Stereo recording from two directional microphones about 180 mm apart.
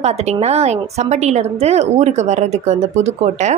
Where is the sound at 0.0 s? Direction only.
35° right (ahead or behind).